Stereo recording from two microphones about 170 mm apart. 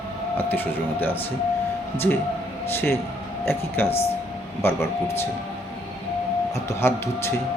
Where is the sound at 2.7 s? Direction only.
15° left (ahead or behind).